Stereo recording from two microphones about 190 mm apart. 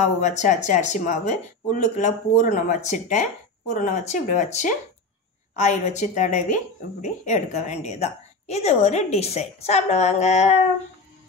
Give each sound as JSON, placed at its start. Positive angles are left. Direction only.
{"t": 0.2, "sound": "a woman's voice", "side_deg": 40}